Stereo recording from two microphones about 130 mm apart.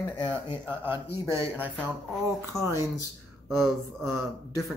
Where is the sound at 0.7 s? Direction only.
15° right (ahead or behind).